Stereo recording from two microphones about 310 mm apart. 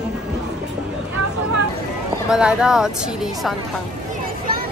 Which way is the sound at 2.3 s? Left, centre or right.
Centre.